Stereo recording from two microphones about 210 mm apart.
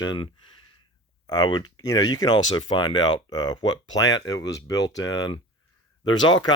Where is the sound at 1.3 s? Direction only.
20° left (ahead or behind).